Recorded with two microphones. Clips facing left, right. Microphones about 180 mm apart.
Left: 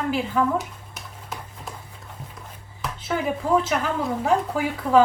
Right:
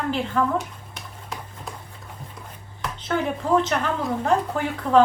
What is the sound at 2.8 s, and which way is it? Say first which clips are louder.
Speech: right 1 dB; 5° left (ahead or behind).